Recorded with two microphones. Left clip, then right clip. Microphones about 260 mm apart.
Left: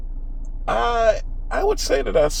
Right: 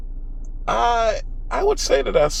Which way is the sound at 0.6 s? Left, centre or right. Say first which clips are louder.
Even; right.